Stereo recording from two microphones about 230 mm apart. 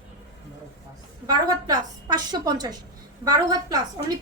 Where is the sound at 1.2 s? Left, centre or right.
Centre.